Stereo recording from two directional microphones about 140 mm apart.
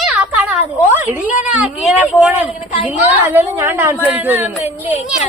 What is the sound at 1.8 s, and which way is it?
A woman's voice, centre (ahead or behind).